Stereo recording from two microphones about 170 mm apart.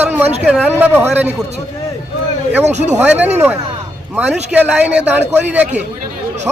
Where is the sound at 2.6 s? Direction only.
40° right (ahead or behind).